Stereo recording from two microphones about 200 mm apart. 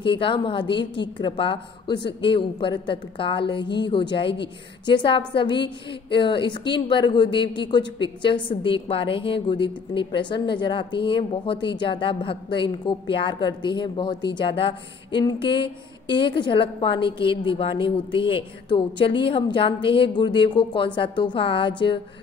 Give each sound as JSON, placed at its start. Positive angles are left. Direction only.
{"t": 0.0, "sound": "a woman's voice", "side_deg": 25}